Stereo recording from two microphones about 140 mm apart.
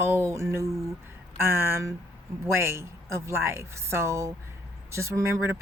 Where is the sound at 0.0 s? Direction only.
15° right (ahead or behind).